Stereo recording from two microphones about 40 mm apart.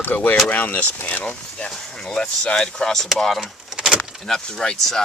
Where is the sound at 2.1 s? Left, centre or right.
Centre.